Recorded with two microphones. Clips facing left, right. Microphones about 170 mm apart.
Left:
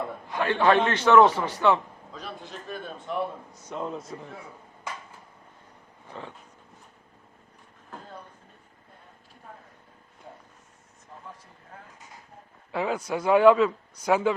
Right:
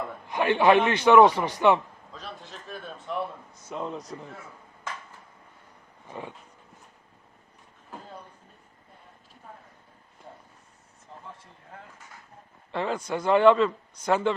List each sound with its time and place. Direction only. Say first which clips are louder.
0.3 s speech: right 2 dB; 15° right (ahead or behind)
2.1 s a man's voice: left 3 dB; centre (ahead or behind)
4.4 s a sound: left 2 dB; 15° left (ahead or behind)
6.1 s speech: right 2 dB; 15° right (ahead or behind)
12.7 s speech: left 1 dB; 5° left (ahead or behind)